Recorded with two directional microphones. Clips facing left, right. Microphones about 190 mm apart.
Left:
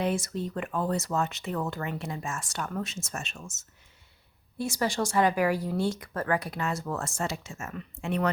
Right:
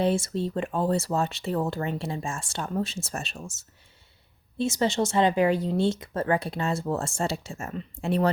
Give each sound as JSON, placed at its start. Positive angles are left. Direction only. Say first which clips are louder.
{"t": 0.0, "sound": "speech", "louder": "right 4 dB", "side_deg": -30}
{"t": 4.5, "sound": "speech", "louder": "right 4 dB", "side_deg": -25}